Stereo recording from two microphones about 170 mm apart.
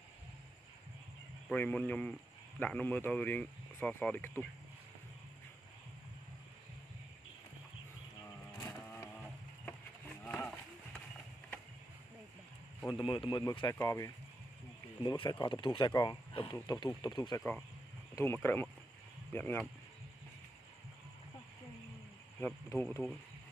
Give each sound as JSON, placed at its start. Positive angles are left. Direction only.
{"t": 1.5, "sound": "speech", "side_deg": 5}
{"t": 8.7, "sound": "vehicle", "side_deg": 10}
{"t": 10.2, "sound": "a sound", "side_deg": 10}
{"t": 12.8, "sound": "speech", "side_deg": 30}
{"t": 17.4, "sound": "speech", "side_deg": 5}
{"t": 22.4, "sound": "speech", "side_deg": 10}